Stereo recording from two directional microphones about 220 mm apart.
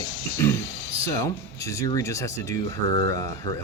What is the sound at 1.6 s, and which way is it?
Speech, 15° left (ahead or behind).